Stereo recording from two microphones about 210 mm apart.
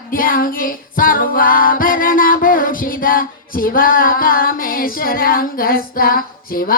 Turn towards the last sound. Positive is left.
turn(degrees=45)  # may be behind; listen again after turning